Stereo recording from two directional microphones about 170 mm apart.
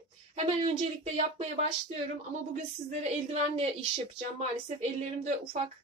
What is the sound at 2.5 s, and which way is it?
A woman's voice, 40° right (ahead or behind).